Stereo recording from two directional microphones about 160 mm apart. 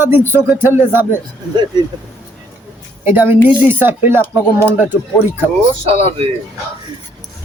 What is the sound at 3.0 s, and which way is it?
Speech, 15° right (ahead or behind).